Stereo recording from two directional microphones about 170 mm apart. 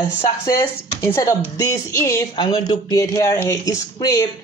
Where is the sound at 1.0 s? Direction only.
15° left (ahead or behind).